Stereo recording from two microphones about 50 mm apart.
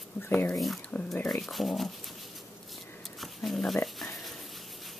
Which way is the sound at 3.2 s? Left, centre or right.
Centre.